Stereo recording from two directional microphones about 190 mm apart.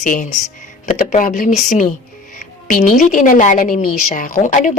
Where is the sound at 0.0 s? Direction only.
45° left (ahead or behind).